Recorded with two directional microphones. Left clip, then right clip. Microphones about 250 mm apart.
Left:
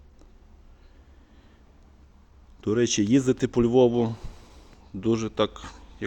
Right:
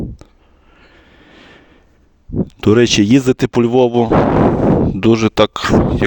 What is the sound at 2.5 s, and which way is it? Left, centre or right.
Speech, right.